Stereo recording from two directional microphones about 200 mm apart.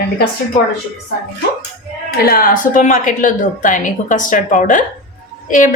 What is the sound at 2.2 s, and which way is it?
Speech, 45° left (ahead or behind).